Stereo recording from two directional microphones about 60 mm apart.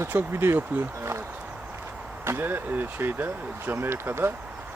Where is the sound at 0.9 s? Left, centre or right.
Right.